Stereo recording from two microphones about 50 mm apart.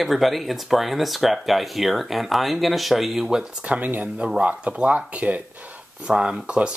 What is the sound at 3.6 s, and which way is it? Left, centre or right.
Speech, right.